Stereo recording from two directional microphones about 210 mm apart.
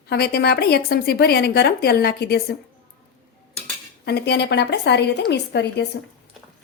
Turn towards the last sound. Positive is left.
turn(degrees=50)  # may be behind; listen again after turning